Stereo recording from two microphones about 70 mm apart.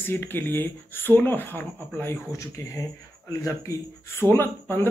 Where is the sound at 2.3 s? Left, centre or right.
Left.